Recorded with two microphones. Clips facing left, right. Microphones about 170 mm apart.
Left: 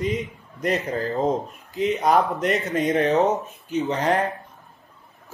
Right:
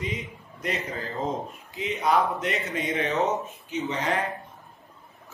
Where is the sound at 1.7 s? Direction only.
45° left (ahead or behind).